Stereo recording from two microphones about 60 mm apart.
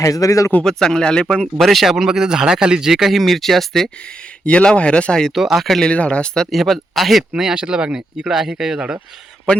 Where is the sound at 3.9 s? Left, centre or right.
Centre.